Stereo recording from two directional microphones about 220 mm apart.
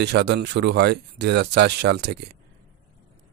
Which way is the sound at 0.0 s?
50° right (ahead or behind).